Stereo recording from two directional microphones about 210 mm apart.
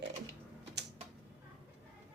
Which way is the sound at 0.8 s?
55° right (ahead or behind).